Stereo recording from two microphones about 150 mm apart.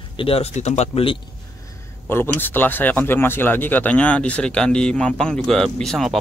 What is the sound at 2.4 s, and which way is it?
A man's voice, 15° left (ahead or behind).